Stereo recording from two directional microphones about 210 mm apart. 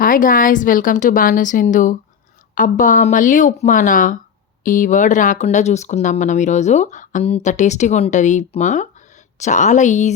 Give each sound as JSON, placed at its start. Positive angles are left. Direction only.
{"t": 0.0, "sound": "speech", "side_deg": 40}